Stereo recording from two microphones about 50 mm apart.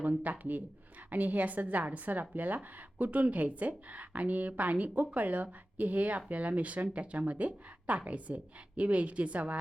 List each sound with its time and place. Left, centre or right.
0.2 s a woman's voice: right